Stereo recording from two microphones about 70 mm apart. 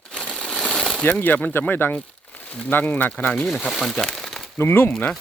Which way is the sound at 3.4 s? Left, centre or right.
Centre.